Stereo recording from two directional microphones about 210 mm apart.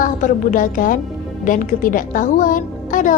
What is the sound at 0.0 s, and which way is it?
A woman's voice, 40° left (ahead or behind).